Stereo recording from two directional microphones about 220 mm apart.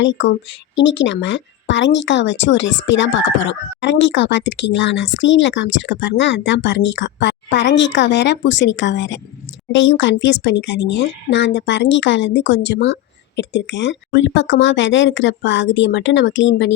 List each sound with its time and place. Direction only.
0.0 s speech: 55° left (ahead or behind)